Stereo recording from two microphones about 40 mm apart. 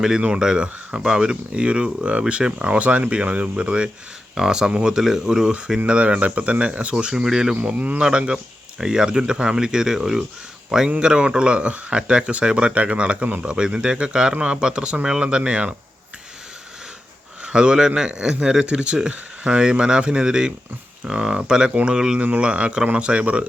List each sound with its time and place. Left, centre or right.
0.3 s speech: right
4.4 s speech: centre
5.5 s speech: right
7.3 s speech: centre
7.5 s speech: right
8.8 s speech: centre
17.4 s speech: right
22.4 s speech: right